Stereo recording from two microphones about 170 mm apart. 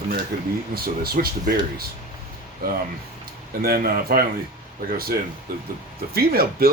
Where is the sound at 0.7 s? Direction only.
60° right (ahead or behind).